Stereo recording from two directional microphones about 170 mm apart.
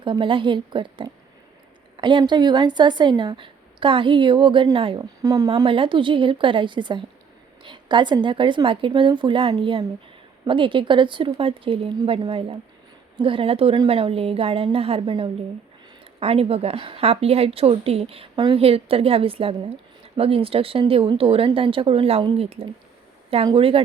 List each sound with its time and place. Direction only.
0.0 s a woman's voice: 30° right (ahead or behind)
5.2 s speech: 20° right (ahead or behind)
5.5 s a woman's voice: 30° right (ahead or behind)